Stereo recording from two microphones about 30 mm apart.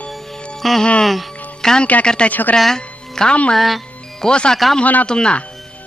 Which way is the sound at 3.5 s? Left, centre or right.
Centre.